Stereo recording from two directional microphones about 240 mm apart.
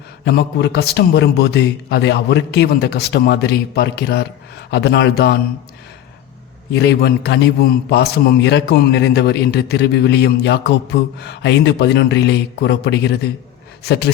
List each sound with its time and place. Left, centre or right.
0.3 s a man's voice: left
6.7 s a man's voice: left